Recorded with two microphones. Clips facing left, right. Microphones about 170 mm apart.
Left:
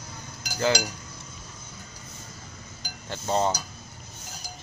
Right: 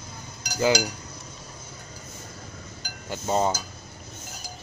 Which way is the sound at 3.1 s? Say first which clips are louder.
Right 1 dB; 5° right (ahead or behind).